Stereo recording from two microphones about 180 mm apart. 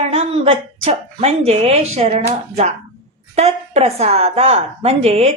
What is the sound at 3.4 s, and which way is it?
A woman's voice, 35° right (ahead or behind).